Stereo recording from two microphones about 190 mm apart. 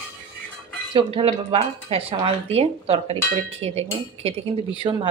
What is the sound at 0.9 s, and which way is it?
Speech, 30° right (ahead or behind).